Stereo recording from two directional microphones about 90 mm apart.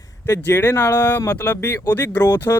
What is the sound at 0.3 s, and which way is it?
Speech, 25° left (ahead or behind).